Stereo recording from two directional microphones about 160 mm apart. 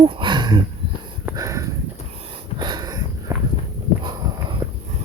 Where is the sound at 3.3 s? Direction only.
15° right (ahead or behind).